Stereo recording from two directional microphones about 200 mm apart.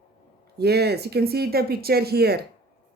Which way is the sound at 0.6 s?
55° right (ahead or behind).